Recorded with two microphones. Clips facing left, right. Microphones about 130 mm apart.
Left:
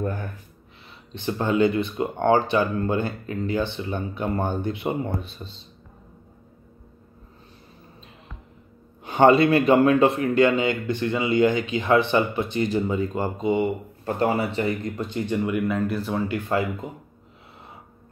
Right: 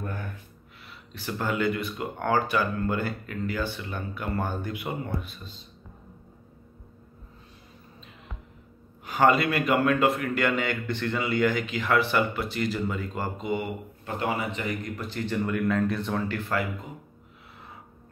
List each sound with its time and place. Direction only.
1.1 s speech: 20° left (ahead or behind)
9.0 s speech: 25° left (ahead or behind)
14.0 s speech: 35° left (ahead or behind); by 16.6 s 20° left (ahead or behind)